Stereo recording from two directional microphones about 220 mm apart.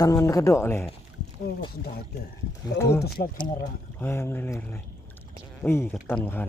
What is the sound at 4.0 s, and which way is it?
Speech, 10° left (ahead or behind).